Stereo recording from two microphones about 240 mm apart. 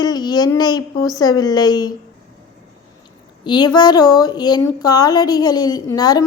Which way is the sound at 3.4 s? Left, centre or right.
Centre.